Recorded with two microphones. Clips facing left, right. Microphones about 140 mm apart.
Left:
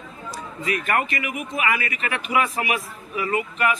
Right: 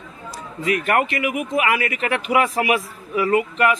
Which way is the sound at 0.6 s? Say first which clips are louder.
Right 4 dB; 75° right (ahead or behind).